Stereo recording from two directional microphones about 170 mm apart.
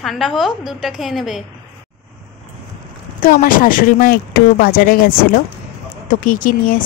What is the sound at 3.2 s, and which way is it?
Speech, 55° left (ahead or behind).